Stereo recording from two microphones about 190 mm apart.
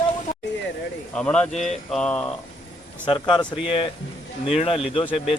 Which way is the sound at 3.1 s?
25° left (ahead or behind).